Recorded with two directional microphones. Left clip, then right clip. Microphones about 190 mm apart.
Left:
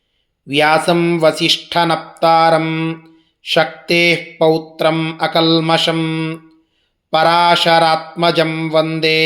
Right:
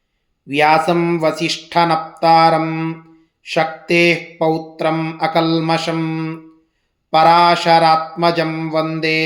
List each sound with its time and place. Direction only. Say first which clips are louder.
0.4 s mantra: even; 20° left (ahead or behind)